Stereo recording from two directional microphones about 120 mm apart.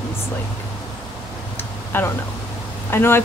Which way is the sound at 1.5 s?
20° left (ahead or behind).